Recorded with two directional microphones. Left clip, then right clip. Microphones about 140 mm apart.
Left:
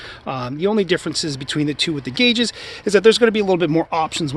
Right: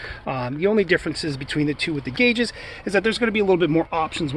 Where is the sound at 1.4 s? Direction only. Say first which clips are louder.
Left 2 dB; 50° left (ahead or behind).